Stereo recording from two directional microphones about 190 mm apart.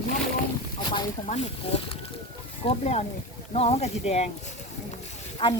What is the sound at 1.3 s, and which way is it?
Speech, 35° left (ahead or behind).